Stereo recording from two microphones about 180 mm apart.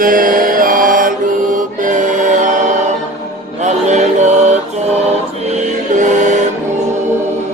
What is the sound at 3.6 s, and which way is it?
Mantra, 40° right (ahead or behind).